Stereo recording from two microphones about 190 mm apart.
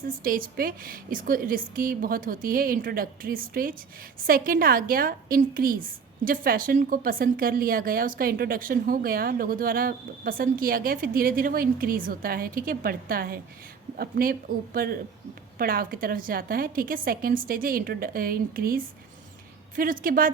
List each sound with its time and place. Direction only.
0.2 s a woman's voice: 50° right (ahead or behind)